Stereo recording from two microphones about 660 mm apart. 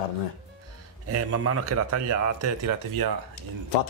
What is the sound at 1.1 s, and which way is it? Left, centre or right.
Speech, right.